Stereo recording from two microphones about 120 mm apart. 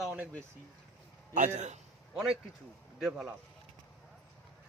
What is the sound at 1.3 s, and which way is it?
Speech, 85° right.